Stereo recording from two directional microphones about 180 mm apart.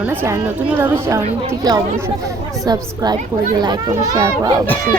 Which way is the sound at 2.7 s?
20° right (ahead or behind).